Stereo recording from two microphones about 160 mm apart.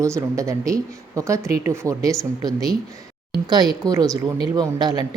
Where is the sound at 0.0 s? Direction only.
20° right (ahead or behind).